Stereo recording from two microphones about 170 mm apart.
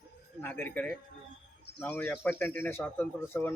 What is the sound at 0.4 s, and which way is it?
Speech, 10° left (ahead or behind).